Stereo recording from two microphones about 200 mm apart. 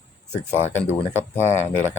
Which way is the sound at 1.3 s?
10° left (ahead or behind).